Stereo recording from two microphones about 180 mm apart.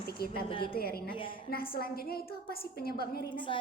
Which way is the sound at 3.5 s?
30° left (ahead or behind).